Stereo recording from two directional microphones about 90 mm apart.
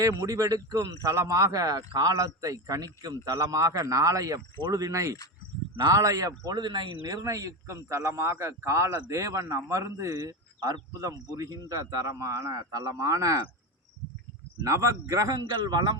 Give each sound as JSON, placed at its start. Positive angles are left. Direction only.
{"t": 0.0, "sound": "a man's voice", "side_deg": -40}
{"t": 6.4, "sound": "speech", "side_deg": -50}
{"t": 7.0, "sound": "a man's voice", "side_deg": -40}
{"t": 14.6, "sound": "speech", "side_deg": -35}